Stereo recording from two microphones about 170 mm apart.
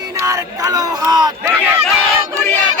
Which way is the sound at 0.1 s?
20° right (ahead or behind).